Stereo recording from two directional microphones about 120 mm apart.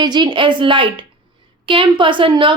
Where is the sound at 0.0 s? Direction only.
35° right (ahead or behind).